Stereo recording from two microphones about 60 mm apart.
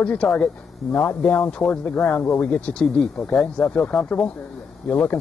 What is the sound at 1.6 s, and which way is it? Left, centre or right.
Speech, centre.